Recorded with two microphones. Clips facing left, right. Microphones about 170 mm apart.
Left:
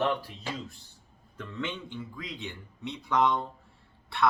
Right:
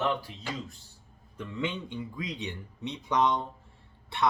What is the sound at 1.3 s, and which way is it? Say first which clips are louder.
Speech: right 2 dB; 15° right (ahead or behind).